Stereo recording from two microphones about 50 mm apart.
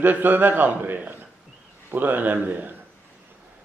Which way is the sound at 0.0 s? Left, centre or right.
Right.